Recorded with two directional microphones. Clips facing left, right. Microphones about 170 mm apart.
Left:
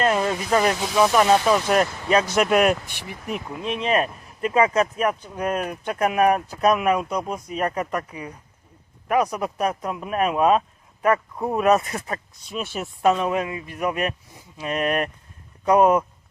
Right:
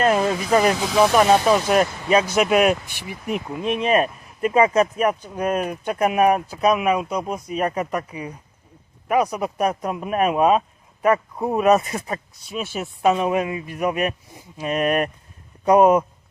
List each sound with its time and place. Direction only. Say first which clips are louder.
0.0 s speech: right 2 dB; 25° right (ahead or behind); by 3.2 s 5° right (ahead or behind)
3.2 s speech: right 4 dB; 15° right (ahead or behind)
5.4 s speech: right 3 dB; 15° right (ahead or behind)
9.6 s speech: right 2 dB; 20° right (ahead or behind)
11.8 s speech: right 2 dB; 20° right (ahead or behind)
12.5 s speech: right 1 dB; 5° right (ahead or behind)
13.1 s speech: right 3 dB; 20° right (ahead or behind)